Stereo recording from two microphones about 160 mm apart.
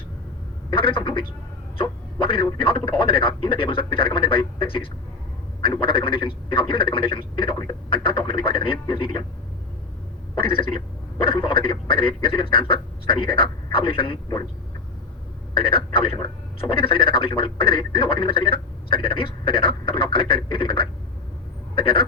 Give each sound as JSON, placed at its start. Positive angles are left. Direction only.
{"t": 0.7, "sound": "speech", "side_deg": 35}
{"t": 10.3, "sound": "speech", "side_deg": 35}
{"t": 15.5, "sound": "speech", "side_deg": 35}